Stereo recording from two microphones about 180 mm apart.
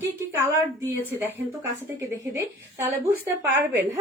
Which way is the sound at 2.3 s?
15° right (ahead or behind).